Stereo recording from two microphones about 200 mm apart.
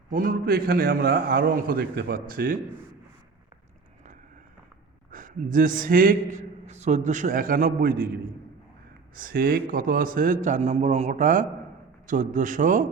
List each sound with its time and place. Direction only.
0.1 s a man's voice: 45° right (ahead or behind)
5.1 s a man's voice: 40° right (ahead or behind)